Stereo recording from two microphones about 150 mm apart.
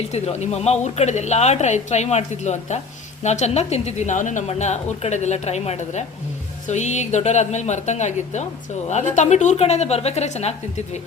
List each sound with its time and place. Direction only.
0.1 s a woman's voice: 45° left (ahead or behind)